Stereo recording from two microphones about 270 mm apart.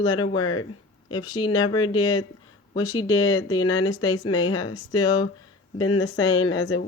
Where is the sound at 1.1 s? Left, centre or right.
Centre.